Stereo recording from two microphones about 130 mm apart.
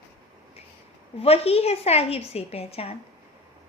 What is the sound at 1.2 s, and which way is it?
A woman's voice, 50° left (ahead or behind).